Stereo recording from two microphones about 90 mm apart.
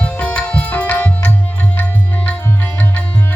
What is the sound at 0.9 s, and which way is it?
Tabla, 20° left (ahead or behind).